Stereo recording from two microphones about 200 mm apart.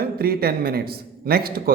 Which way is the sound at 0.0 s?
50° right (ahead or behind).